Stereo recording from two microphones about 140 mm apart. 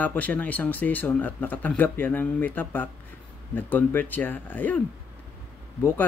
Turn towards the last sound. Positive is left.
turn(degrees=15)  # may be behind; listen again after turning